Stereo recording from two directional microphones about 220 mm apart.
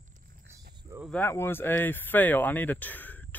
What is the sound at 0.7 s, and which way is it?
Cricket, 20° right (ahead or behind).